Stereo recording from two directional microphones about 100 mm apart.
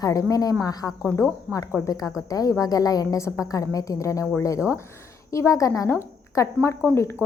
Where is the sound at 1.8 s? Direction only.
40° left (ahead or behind).